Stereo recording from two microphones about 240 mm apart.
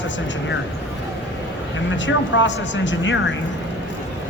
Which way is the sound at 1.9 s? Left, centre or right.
Left.